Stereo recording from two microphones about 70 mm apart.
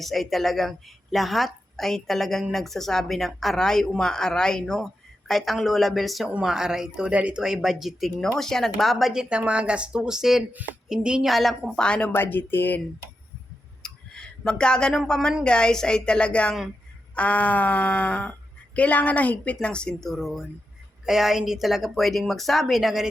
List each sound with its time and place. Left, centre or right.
0.0 s a woman's voice: centre
7.4 s speech: centre
8.2 s a woman's voice: centre
9.3 s speech: centre
10.5 s speech: right
10.8 s a woman's voice: centre
11.8 s speech: centre
12.1 s speech: left
13.8 s a woman's voice: centre